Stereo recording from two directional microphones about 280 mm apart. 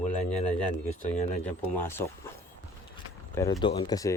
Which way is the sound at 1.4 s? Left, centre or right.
Centre.